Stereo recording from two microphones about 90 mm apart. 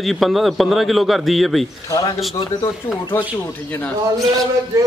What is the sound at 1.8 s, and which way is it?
Speech, 40° left (ahead or behind).